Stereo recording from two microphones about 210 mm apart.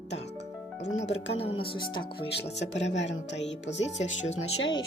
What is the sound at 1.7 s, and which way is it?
Speech, 20° left (ahead or behind).